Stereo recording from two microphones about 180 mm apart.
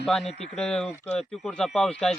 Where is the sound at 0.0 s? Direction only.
Centre (ahead or behind).